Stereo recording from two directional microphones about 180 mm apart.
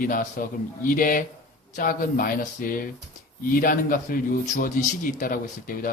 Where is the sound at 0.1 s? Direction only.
50° left (ahead or behind).